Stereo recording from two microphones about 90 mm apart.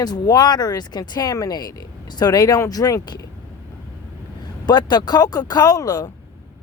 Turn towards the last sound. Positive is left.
turn(degrees=45)  # may be behind; listen again after turning